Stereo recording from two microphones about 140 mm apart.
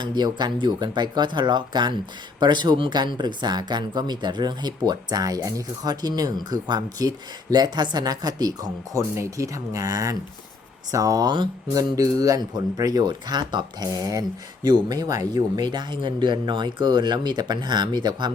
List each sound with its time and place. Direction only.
0.0 s speech: 30° right (ahead or behind)